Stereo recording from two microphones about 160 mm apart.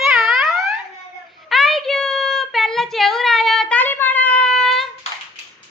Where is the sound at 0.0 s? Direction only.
Centre (ahead or behind).